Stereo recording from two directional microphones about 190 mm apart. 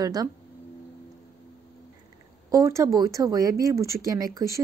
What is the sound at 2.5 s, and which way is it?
Speech, 15° right (ahead or behind).